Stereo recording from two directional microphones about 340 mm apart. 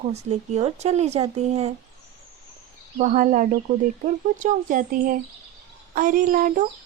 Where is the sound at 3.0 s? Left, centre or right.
Right.